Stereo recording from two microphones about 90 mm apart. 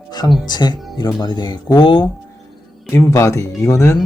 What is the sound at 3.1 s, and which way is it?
Speech, 35° left (ahead or behind).